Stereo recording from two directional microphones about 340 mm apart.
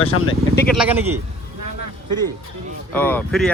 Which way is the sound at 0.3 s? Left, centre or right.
Centre.